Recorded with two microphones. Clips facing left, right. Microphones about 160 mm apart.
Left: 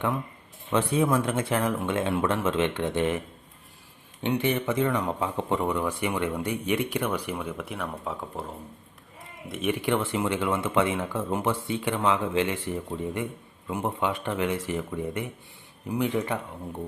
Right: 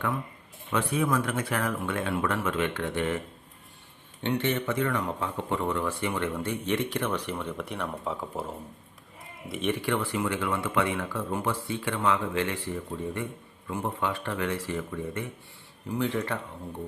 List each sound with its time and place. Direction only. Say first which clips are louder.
0.7 s speech: left 3 dB; 25° left (ahead or behind)
4.2 s speech: left 2 dB; 10° left (ahead or behind)
9.5 s speech: left 1 dB; centre (ahead or behind)
9.7 s speech: left 2 dB; 20° left (ahead or behind)